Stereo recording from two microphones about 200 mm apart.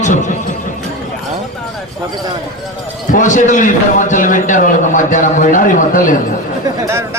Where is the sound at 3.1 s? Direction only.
40° left (ahead or behind).